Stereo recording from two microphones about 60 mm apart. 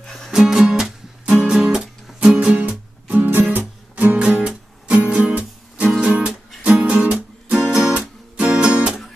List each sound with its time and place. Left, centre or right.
0.0 s music: centre
0.3 s music: centre
1.3 s guitar: centre
2.1 s music: right
5.9 s music: centre
6.1 s music: right